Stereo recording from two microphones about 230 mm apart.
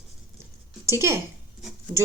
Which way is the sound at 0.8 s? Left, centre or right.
Centre.